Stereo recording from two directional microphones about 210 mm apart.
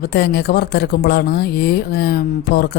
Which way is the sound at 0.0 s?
50° left (ahead or behind).